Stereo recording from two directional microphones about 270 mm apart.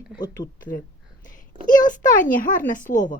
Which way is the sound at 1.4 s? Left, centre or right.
Left.